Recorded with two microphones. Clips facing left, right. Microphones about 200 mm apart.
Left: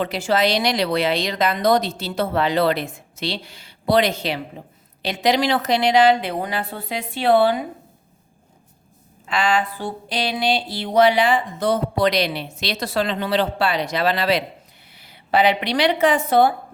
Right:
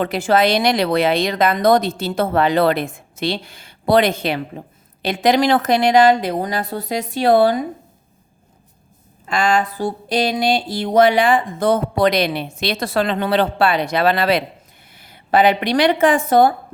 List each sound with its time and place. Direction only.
0.0 s speech: 50° right (ahead or behind)
9.2 s a woman's voice: 45° right (ahead or behind)